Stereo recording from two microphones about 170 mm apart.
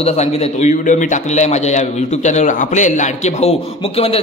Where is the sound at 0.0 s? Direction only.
40° left (ahead or behind).